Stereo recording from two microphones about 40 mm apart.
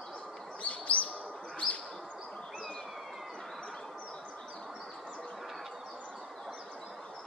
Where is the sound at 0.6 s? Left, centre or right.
Left.